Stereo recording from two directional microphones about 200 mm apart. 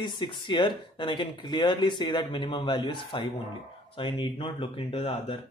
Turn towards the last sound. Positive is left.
turn(degrees=30)  # may be behind; listen again after turning